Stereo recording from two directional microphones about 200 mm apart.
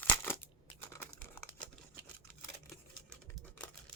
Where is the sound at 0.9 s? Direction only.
10° left (ahead or behind).